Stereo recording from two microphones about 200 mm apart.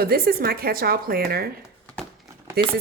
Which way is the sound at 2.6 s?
50° right (ahead or behind).